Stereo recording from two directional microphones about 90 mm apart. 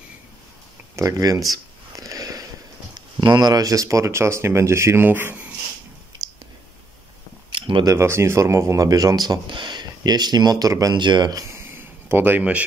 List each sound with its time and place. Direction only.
0.9 s speech: 40° right (ahead or behind); by 5.4 s 20° right (ahead or behind)
6.1 s clicking: 50° right (ahead or behind)
7.5 s a sound: 70° right (ahead or behind)
7.8 s speech: 30° right (ahead or behind)
11.0 s speech: 55° right (ahead or behind)
11.5 s a sound: 25° right (ahead or behind)